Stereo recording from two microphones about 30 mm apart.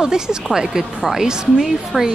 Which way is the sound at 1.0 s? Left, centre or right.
Centre.